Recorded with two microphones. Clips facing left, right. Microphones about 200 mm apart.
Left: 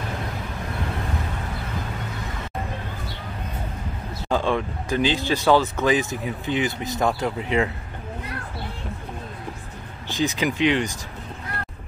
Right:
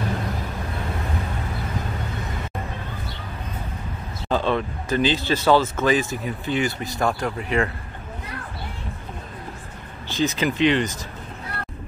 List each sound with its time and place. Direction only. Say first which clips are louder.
4.3 s speech: right 1 dB; 15° left (ahead or behind)
10.0 s speech: right 1 dB; 15° left (ahead or behind)